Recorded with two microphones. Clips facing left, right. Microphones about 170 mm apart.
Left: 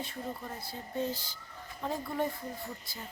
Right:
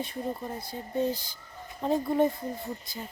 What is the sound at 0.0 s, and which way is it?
A woman's voice, 20° right (ahead or behind).